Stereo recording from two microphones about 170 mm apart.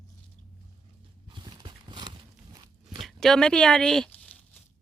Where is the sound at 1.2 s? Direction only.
30° right (ahead or behind).